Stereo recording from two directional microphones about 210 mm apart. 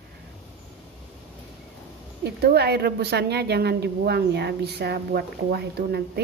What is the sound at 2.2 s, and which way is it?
A woman's voice, 50° right (ahead or behind).